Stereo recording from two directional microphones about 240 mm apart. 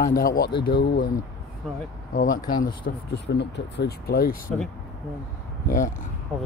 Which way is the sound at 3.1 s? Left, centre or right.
Left.